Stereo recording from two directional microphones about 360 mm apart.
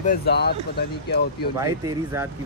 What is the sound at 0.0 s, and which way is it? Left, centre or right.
Speech, left.